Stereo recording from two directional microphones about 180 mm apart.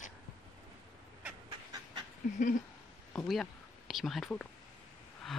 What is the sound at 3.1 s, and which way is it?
Speech, centre (ahead or behind).